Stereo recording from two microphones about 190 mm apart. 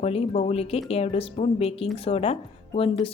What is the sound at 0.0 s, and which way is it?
Speech, 30° left (ahead or behind).